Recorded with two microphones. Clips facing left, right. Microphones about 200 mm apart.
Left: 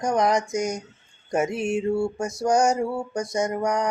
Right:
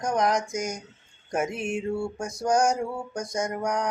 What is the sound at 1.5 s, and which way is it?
Mantra, 35° left (ahead or behind).